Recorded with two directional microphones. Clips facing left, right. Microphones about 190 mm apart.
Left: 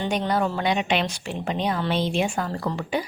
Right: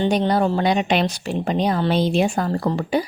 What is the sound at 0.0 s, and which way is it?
Speech, 30° right (ahead or behind).